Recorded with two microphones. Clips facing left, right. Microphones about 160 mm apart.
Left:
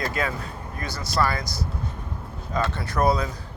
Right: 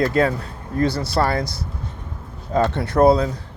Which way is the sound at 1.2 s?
30° right (ahead or behind).